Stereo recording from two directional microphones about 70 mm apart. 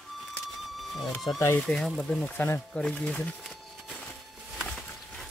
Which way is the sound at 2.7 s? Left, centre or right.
Centre.